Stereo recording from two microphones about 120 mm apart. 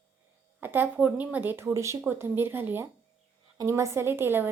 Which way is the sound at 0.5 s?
15° right (ahead or behind).